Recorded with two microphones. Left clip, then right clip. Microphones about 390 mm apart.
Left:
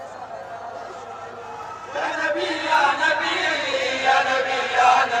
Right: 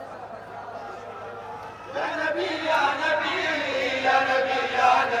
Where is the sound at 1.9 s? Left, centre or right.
Left.